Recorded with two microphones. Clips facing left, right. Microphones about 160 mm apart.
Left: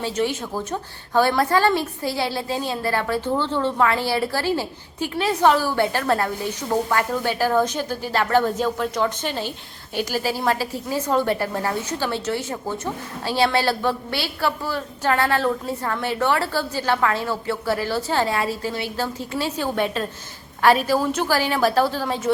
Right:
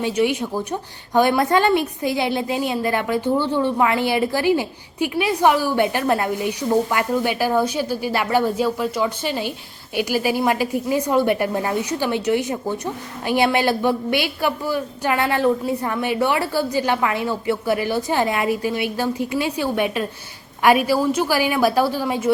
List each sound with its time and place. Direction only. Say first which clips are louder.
0.0 s a woman's voice: right 4 dB; 15° right (ahead or behind)